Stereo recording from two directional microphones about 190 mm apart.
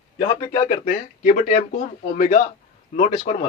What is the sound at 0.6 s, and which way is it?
Speech, 35° left (ahead or behind).